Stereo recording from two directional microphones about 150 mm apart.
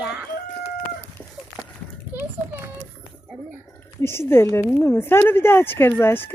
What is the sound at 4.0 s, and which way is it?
Speech, 15° left (ahead or behind).